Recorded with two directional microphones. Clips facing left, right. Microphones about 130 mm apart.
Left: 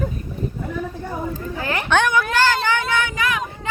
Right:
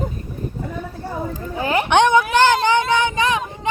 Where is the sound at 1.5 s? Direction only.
15° right (ahead or behind).